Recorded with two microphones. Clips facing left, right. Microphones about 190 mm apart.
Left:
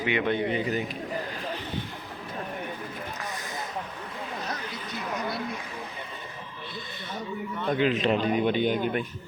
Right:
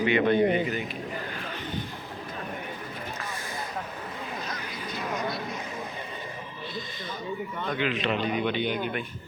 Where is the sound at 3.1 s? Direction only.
20° left (ahead or behind).